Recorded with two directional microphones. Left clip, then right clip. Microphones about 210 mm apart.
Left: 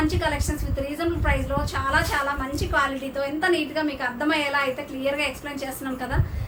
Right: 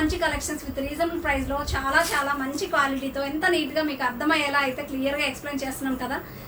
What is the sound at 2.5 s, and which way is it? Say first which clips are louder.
A woman's voice: even; 15° left (ahead or behind).